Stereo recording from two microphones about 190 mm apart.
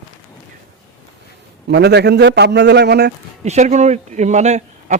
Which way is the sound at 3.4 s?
35° right (ahead or behind).